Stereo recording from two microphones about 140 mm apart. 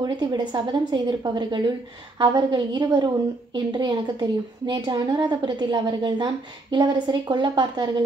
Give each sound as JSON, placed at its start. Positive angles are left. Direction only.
{"t": 0.0, "sound": "a woman's voice", "side_deg": -30}